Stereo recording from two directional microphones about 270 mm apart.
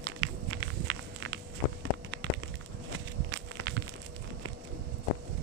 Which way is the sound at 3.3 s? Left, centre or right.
Right.